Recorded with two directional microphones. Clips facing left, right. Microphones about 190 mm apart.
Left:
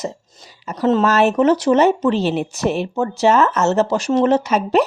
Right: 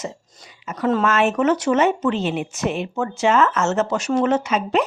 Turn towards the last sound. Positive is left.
turn(degrees=40)  # may be behind; listen again after turning